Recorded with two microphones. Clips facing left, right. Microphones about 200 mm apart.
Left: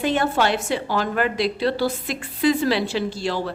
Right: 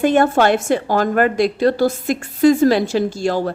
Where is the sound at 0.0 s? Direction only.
50° right (ahead or behind).